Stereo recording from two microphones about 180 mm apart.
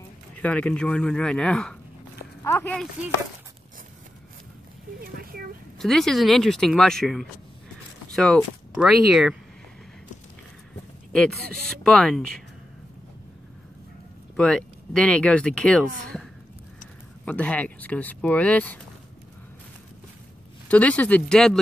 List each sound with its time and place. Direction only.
0.4 s speech: 5° left (ahead or behind)
2.7 s speech: centre (ahead or behind)
5.0 s speech: 55° right (ahead or behind)
5.8 s speech: centre (ahead or behind)
11.8 s speech: 5° left (ahead or behind)
14.3 s speech: 5° left (ahead or behind)
20.6 s speech: 10° left (ahead or behind)